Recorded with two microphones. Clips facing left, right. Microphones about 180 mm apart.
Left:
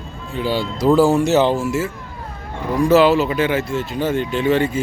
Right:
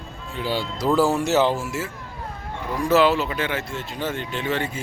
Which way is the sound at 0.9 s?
30° left (ahead or behind).